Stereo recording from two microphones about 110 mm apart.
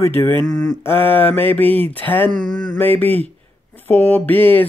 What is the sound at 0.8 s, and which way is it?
Speech, 20° left (ahead or behind).